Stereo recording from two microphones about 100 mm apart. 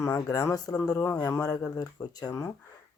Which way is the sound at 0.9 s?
20° left (ahead or behind).